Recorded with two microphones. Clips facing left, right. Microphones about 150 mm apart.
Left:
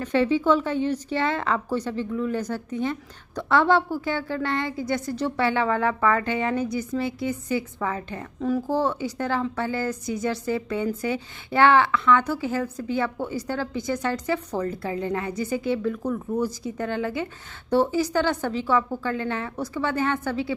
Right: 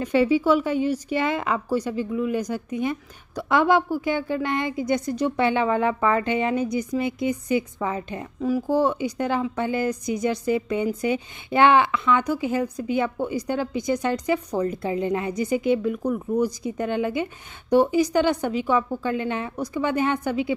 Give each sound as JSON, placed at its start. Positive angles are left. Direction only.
{"t": 0.0, "sound": "a woman's voice", "side_deg": -10}
{"t": 8.4, "sound": "a woman's voice", "side_deg": -5}